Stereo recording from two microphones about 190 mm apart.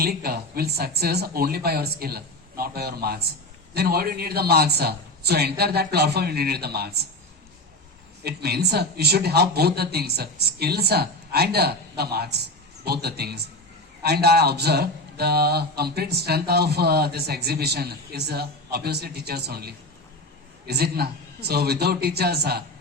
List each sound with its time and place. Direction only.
0.0 s speech: 55° right (ahead or behind)
8.2 s speech: 55° right (ahead or behind)